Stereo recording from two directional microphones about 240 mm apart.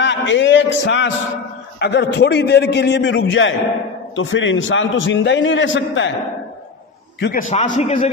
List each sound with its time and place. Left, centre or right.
0.0 s a man's voice: left
7.2 s a man's voice: left
7.4 s a man's voice: left